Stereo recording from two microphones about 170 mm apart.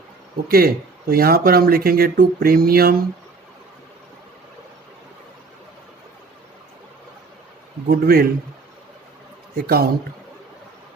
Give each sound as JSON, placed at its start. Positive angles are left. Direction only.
{"t": 0.4, "sound": "speech", "side_deg": -60}
{"t": 7.9, "sound": "speech", "side_deg": -60}
{"t": 9.6, "sound": "speech", "side_deg": -65}